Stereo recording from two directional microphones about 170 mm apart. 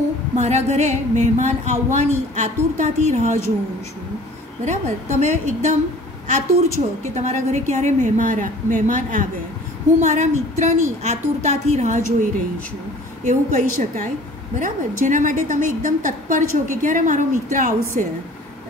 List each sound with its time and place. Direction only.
0.4 s a woman's voice: 40° right (ahead or behind)
4.6 s a woman's voice: 45° right (ahead or behind)
7.2 s a woman's voice: 45° right (ahead or behind)